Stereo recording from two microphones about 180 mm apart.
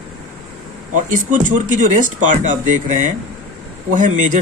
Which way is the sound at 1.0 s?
45° right (ahead or behind).